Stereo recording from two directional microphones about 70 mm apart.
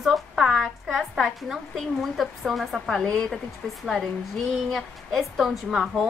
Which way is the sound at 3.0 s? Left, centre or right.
Centre.